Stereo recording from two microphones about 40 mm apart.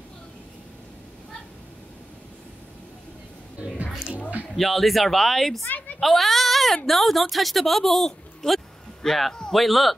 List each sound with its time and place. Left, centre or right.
3.5 s music: right
4.6 s speech: centre